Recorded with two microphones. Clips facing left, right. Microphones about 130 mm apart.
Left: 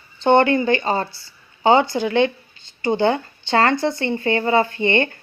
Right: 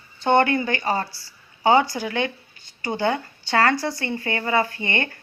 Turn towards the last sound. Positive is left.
turn(degrees=25)  # may be behind; listen again after turning